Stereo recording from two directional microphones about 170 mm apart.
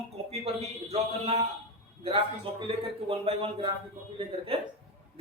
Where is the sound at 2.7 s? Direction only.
35° right (ahead or behind).